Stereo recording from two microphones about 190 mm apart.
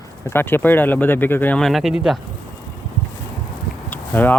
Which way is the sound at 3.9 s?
10° left (ahead or behind).